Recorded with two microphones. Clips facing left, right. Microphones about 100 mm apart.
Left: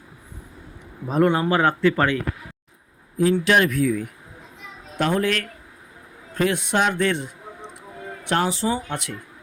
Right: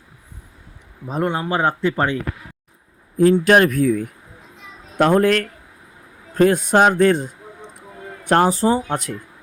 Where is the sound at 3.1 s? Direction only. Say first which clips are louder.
Right 5 dB; 50° right (ahead or behind).